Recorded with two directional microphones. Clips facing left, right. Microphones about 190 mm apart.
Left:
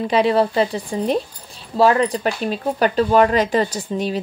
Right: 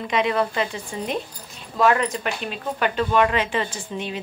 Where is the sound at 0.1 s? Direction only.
35° left (ahead or behind).